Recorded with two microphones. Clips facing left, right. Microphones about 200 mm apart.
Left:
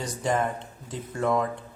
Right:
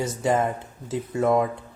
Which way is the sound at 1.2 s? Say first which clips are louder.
Right 4 dB; 20° right (ahead or behind).